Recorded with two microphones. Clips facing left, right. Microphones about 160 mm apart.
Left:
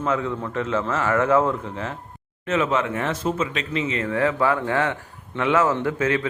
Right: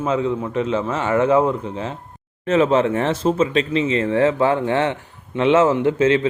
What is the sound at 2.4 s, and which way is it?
Speech, 30° right (ahead or behind).